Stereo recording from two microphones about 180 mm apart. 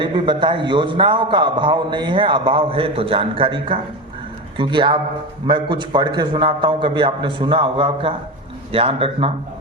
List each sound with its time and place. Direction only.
0.0 s a man's voice: 25° right (ahead or behind)